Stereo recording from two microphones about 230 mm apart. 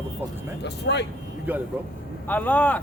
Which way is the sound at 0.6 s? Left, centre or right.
Left.